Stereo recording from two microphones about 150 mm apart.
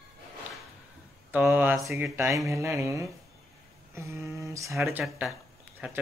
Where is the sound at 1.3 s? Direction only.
10° right (ahead or behind).